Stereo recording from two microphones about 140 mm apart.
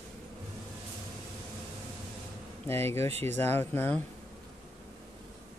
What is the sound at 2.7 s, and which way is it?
Speech, 15° left (ahead or behind).